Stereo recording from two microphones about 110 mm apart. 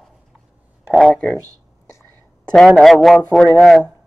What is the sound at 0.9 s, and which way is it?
Speech, 5° left (ahead or behind).